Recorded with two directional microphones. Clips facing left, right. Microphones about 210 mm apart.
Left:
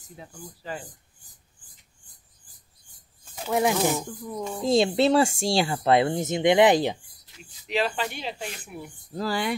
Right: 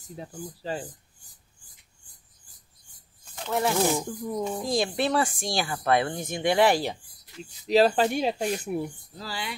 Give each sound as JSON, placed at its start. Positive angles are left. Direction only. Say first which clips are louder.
{"t": 0.2, "sound": "speech", "louder": "right 5 dB", "side_deg": -35}
{"t": 3.3, "sound": "a sound", "louder": "left 3 dB", "side_deg": 5}
{"t": 3.9, "sound": "speech", "louder": "right 2 dB", "side_deg": -15}
{"t": 4.6, "sound": "speech", "louder": "left 8 dB", "side_deg": 25}
{"t": 7.6, "sound": "speech", "louder": "right 7 dB", "side_deg": -40}
{"t": 9.1, "sound": "speech", "louder": "left 9 dB", "side_deg": 50}